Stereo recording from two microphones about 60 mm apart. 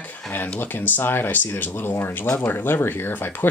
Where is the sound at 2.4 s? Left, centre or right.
Left.